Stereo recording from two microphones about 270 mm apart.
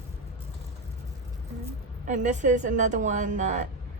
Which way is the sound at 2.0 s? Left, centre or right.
Right.